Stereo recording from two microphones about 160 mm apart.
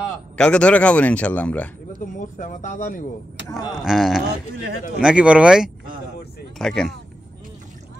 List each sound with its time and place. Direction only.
0.4 s speech: 5° left (ahead or behind)
2.0 s speech: 55° left (ahead or behind)
3.7 s speech: 5° right (ahead or behind)